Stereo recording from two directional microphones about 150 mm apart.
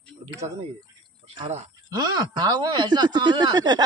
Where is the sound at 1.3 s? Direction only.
45° right (ahead or behind).